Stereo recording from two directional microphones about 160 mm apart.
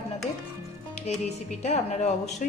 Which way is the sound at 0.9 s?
45° left (ahead or behind).